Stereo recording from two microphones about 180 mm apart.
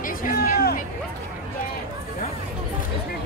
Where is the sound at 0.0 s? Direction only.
50° left (ahead or behind).